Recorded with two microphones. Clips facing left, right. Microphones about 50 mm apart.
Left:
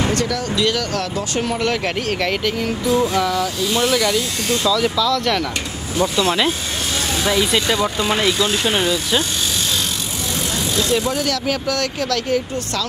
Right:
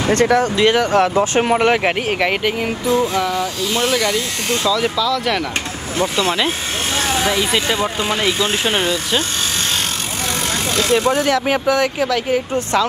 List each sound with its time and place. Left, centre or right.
0.1 s speech: right; by 5.4 s centre
7.6 s speech: right
10.8 s speech: right
11.2 s speech: right